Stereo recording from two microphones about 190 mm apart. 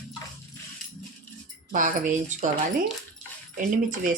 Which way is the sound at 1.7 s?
40° right (ahead or behind).